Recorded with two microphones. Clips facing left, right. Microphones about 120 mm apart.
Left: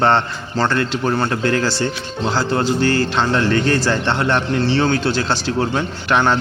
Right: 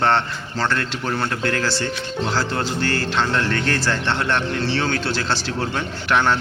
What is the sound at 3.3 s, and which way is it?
A man's voice, 10° left (ahead or behind).